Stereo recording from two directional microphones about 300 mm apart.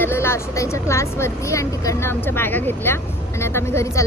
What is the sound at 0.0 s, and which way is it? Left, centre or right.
Speech, centre.